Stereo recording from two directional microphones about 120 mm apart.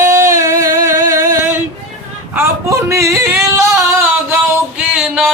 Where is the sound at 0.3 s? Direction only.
25° right (ahead or behind).